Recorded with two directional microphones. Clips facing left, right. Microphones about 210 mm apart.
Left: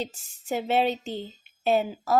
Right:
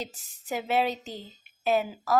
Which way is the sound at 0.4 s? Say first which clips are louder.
Left 3 dB; 30° left (ahead or behind).